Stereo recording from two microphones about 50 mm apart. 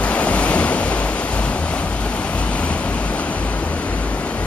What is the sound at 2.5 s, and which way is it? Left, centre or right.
Vehicle, left.